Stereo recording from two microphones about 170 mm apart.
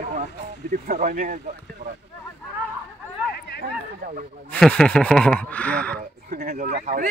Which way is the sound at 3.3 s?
90° left.